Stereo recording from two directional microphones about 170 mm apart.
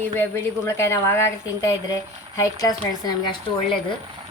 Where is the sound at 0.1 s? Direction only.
10° left (ahead or behind).